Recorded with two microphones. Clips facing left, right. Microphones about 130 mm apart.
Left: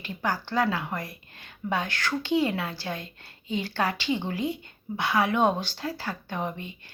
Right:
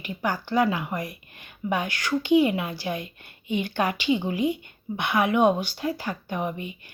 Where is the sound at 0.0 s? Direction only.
15° right (ahead or behind).